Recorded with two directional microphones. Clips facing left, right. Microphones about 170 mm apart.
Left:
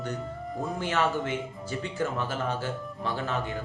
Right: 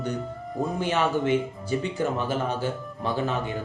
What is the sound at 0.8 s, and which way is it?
Speech, 15° right (ahead or behind).